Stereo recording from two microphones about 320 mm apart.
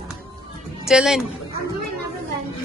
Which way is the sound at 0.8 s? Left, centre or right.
Centre.